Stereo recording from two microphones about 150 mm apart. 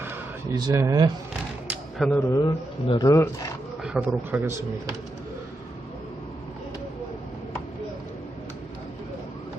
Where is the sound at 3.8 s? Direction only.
10° right (ahead or behind).